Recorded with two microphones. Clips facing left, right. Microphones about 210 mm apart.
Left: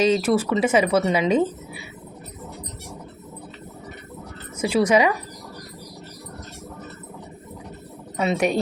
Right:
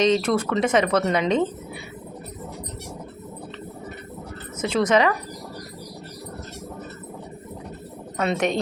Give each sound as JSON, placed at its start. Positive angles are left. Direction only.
{"t": 0.0, "sound": "speech", "side_deg": 5}
{"t": 4.6, "sound": "speech", "side_deg": 10}
{"t": 8.1, "sound": "speech", "side_deg": 5}